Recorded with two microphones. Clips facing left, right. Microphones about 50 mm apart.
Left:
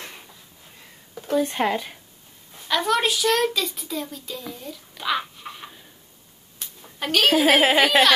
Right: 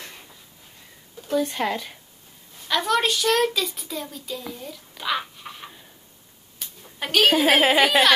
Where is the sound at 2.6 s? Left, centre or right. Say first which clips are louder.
Even; centre.